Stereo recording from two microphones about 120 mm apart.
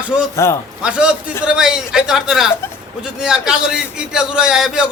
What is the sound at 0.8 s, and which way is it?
A man's voice, 10° right (ahead or behind).